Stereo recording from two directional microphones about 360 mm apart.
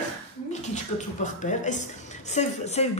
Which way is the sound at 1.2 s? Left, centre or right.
Centre.